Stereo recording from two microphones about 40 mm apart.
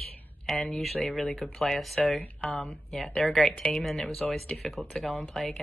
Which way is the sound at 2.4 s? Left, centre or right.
Centre.